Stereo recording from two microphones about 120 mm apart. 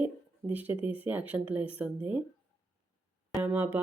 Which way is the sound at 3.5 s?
15° right (ahead or behind).